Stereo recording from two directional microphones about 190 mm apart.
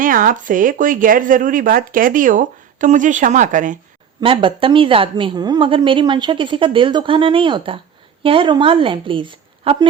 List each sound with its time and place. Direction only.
0.0 s speech: 45° right (ahead or behind)
4.2 s a woman's voice: 25° right (ahead or behind)